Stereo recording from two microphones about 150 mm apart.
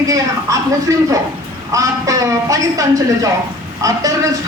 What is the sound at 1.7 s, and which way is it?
A man's voice, 20° right (ahead or behind).